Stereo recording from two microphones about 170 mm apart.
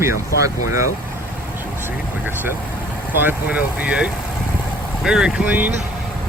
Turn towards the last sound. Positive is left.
turn(degrees=-10)  # may be behind; listen again after turning